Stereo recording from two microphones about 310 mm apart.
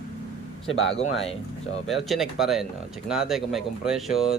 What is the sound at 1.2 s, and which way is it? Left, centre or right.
Speech, centre.